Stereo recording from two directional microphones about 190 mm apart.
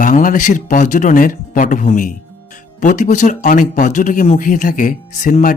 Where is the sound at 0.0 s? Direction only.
45° left (ahead or behind).